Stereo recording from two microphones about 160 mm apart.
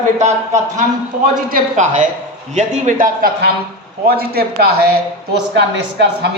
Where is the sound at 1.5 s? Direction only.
50° right (ahead or behind).